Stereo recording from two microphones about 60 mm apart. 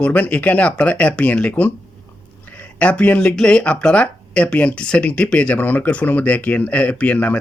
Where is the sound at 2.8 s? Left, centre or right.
Left.